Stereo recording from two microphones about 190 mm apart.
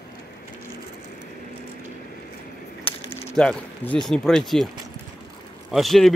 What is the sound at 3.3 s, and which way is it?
Speech, 5° left (ahead or behind).